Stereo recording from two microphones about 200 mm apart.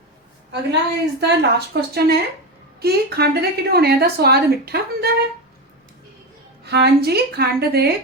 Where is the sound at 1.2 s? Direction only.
55° right (ahead or behind).